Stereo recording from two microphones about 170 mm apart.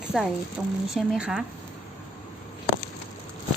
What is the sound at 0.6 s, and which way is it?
Speech, 5° right (ahead or behind).